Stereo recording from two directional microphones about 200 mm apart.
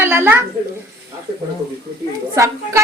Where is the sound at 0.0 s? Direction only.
10° right (ahead or behind).